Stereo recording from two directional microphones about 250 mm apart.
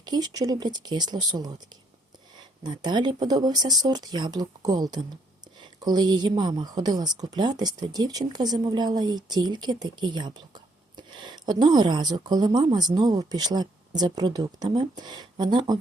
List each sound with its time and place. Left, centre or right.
0.0 s speech: centre
2.6 s speech: centre